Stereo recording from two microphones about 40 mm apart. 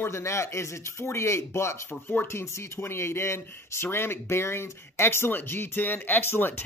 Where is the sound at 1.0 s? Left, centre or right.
Left.